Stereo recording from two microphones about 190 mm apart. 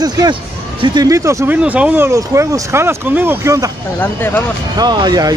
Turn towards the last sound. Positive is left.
turn(degrees=-20)  # may be behind; listen again after turning